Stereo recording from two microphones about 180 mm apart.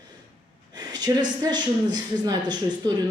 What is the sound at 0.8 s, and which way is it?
A woman's voice, 25° right (ahead or behind).